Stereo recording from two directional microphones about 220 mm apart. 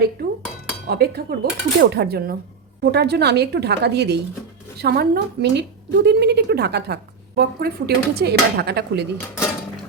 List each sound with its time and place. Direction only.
0.9 s a woman's voice: 45° right (ahead or behind)